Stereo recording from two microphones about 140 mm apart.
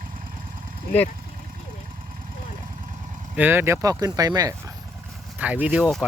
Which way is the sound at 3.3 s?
15° right (ahead or behind).